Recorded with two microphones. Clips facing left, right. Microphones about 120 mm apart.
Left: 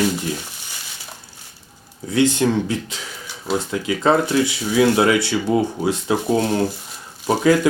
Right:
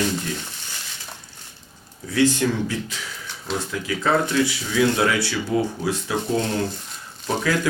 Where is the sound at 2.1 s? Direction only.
20° left (ahead or behind).